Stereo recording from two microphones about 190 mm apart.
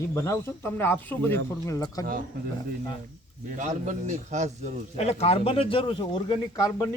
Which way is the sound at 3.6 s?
40° right (ahead or behind).